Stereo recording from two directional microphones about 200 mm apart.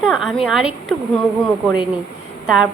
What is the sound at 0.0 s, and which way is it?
A woman's voice, centre (ahead or behind).